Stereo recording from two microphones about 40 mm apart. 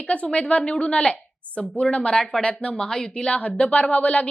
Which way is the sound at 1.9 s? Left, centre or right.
Left.